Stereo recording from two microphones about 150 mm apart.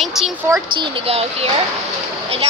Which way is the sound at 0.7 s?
40° right (ahead or behind).